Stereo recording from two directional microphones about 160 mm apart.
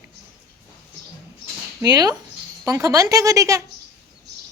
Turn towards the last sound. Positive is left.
turn(degrees=-20)  # may be behind; listen again after turning